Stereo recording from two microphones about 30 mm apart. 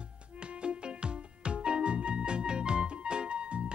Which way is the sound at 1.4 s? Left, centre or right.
Right.